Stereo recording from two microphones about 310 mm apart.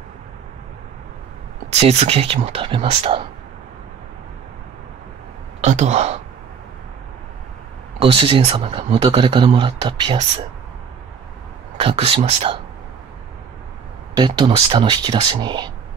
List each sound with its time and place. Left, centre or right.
1.7 s speech: right
5.6 s speech: right
8.0 s speech: centre
11.7 s speech: centre
14.1 s speech: centre